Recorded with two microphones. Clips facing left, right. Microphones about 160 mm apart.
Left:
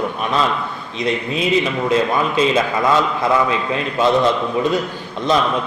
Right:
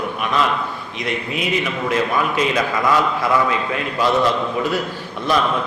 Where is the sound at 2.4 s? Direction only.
25° left (ahead or behind).